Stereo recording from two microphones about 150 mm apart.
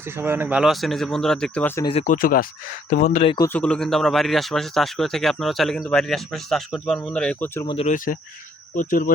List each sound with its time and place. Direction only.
0.2 s speech: 15° right (ahead or behind); by 1.7 s 5° left (ahead or behind)
2.0 s speech: 70° left (ahead or behind)
2.9 s speech: 55° left (ahead or behind)
3.2 s a man's voice: 25° left (ahead or behind)
3.5 s speech: 5° left (ahead or behind)
7.9 s speech: 65° left (ahead or behind)